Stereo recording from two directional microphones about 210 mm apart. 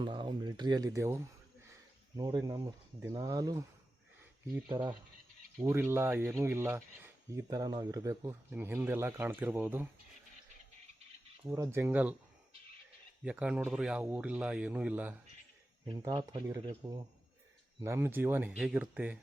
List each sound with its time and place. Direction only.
0.0 s speech: 20° right (ahead or behind)
11.4 s speech: 15° right (ahead or behind)
13.2 s speech: 5° right (ahead or behind)
15.9 s speech: 25° right (ahead or behind); by 19.2 s 5° right (ahead or behind)